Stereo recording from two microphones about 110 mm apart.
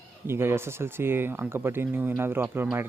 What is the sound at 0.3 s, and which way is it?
Speech, 20° right (ahead or behind).